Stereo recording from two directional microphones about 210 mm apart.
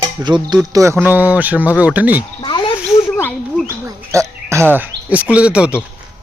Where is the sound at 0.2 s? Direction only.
20° right (ahead or behind).